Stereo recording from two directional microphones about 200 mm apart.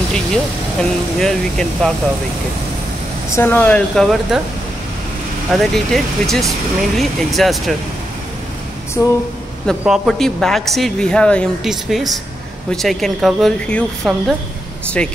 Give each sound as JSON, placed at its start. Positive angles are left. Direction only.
{"t": 0.1, "sound": "speech", "side_deg": 5}
{"t": 3.3, "sound": "speech", "side_deg": 10}
{"t": 5.5, "sound": "speech", "side_deg": 0}
{"t": 9.0, "sound": "a sound", "side_deg": 15}
{"t": 9.7, "sound": "speech", "side_deg": 0}